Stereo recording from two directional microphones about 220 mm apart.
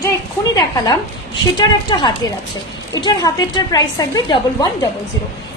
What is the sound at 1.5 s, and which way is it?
A woman's voice, 20° left (ahead or behind).